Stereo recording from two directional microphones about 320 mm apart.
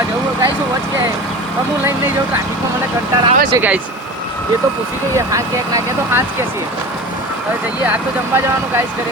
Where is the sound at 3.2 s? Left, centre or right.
Right.